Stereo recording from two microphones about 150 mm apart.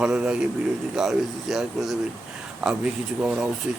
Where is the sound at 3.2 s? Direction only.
5° right (ahead or behind).